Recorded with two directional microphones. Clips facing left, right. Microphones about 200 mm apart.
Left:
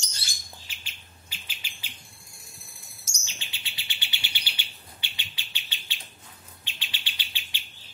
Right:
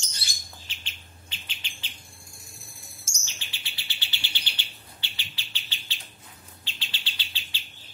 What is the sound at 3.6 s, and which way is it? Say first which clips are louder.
Bird: even; 15° left (ahead or behind).